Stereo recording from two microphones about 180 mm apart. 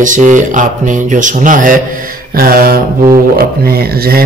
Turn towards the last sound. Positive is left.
turn(degrees=-55)  # may be behind; listen again after turning